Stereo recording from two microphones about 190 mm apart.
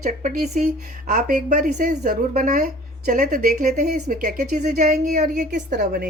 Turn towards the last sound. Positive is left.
turn(degrees=-50)  # may be behind; listen again after turning